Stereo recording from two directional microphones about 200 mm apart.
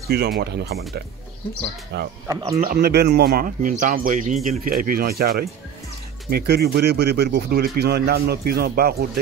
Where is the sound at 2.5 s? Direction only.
45° right (ahead or behind).